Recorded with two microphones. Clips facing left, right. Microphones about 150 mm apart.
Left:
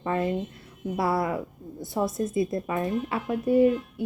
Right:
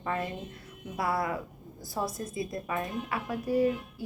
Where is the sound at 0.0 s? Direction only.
25° left (ahead or behind).